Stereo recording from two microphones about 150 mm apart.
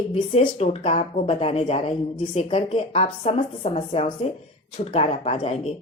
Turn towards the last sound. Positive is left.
turn(degrees=45)  # may be behind; listen again after turning